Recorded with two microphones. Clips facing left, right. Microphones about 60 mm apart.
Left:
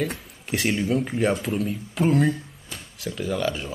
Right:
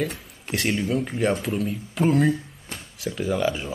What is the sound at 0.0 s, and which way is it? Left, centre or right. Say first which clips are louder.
Speech: even; centre.